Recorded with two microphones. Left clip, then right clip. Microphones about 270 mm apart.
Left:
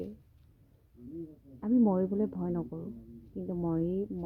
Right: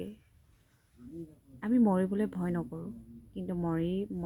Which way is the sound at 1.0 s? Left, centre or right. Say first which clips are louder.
Left 2 dB; right.